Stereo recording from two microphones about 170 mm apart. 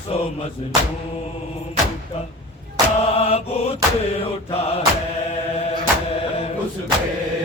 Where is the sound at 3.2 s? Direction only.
35° left (ahead or behind).